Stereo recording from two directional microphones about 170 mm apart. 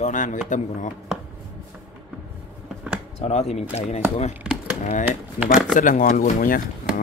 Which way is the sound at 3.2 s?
40° left (ahead or behind).